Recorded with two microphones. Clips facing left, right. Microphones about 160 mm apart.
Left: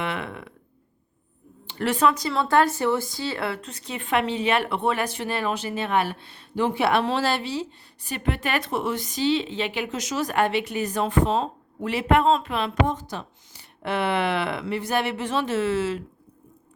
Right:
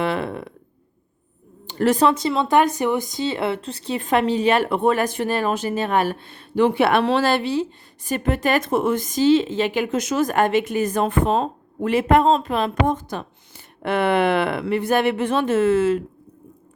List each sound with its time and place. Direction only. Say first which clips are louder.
0.0 s speech: right 7 dB; 35° right (ahead or behind)
1.6 s speech: right 5 dB; 40° right (ahead or behind)